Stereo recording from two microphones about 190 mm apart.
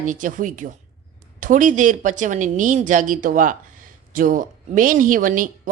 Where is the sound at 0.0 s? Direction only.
45° right (ahead or behind).